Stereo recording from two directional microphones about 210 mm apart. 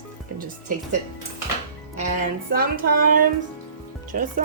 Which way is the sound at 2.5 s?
45° right (ahead or behind).